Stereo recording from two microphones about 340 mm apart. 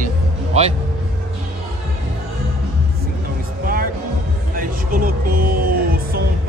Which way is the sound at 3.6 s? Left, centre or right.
Right.